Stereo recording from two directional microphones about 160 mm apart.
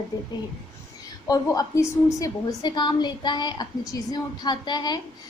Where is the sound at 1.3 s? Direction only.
20° left (ahead or behind).